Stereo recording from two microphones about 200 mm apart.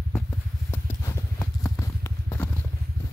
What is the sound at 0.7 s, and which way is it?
Clip-clop, 15° left (ahead or behind).